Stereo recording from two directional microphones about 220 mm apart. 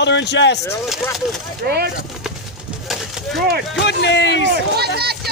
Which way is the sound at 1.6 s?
45° right (ahead or behind).